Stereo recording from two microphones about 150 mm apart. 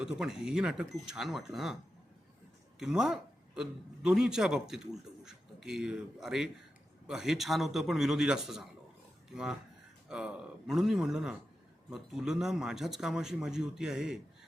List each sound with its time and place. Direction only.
0.0 s a man's voice: 5° right (ahead or behind)